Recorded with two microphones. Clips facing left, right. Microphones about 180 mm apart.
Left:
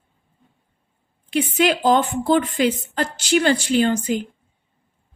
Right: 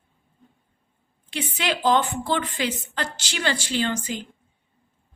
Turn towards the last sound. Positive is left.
turn(degrees=55)  # may be behind; listen again after turning